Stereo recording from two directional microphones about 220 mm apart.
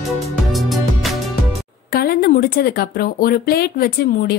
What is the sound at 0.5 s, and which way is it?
Music, centre (ahead or behind).